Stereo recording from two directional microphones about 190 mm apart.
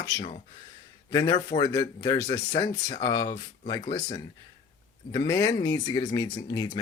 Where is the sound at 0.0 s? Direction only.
20° left (ahead or behind).